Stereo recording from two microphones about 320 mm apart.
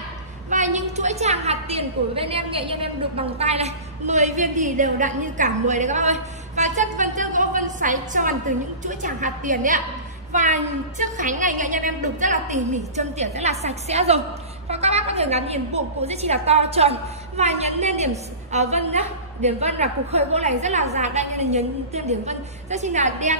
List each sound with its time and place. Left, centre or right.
0.5 s a woman's voice: right